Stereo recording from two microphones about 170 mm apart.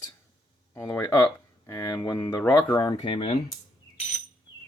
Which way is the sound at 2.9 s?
35° left (ahead or behind).